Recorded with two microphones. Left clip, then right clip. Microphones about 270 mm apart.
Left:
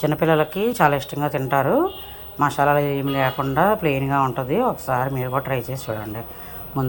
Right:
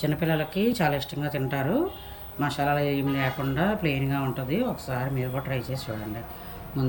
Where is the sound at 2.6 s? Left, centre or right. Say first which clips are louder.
Left 5 dB; left.